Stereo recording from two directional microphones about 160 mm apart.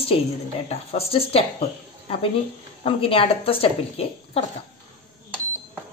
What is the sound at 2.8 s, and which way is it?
A woman's voice, 35° left (ahead or behind).